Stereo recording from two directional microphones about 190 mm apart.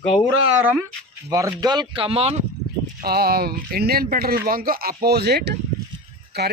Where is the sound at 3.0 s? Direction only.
55° right (ahead or behind).